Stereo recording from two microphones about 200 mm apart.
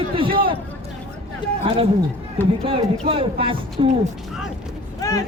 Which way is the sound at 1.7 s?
25° right (ahead or behind).